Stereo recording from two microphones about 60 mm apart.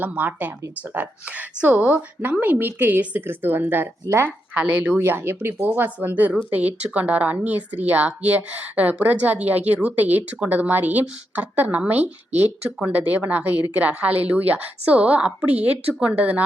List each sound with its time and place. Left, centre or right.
0.0 s speech: right
4.5 s speech: right
4.9 s speech: right